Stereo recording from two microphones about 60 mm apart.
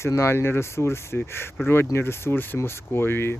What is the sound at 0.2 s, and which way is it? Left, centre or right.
Speech, left.